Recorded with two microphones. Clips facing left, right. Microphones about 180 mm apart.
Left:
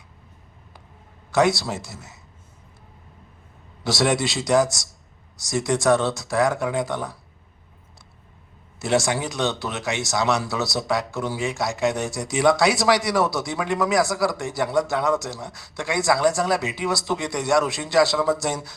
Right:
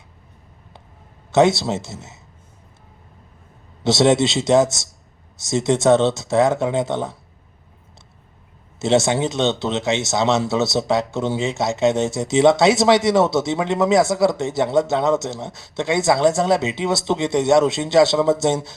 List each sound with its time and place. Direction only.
1.3 s speech: 25° right (ahead or behind)
3.8 s speech: 25° right (ahead or behind)
8.8 s speech: 25° right (ahead or behind)